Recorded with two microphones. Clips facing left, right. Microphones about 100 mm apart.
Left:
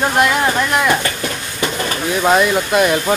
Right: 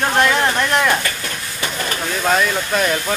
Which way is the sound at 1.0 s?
20° left (ahead or behind).